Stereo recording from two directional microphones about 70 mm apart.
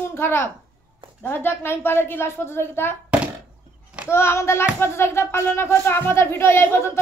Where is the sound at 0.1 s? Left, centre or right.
Left.